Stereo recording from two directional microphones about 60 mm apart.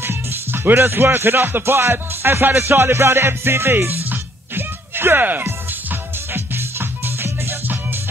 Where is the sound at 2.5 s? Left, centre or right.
Right.